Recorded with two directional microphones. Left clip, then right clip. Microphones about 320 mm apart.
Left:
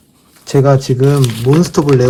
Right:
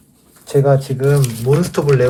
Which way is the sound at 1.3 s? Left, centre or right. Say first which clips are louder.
Left 4 dB; centre.